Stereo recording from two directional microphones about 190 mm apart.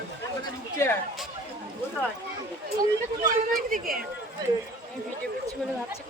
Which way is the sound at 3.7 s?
50° right (ahead or behind).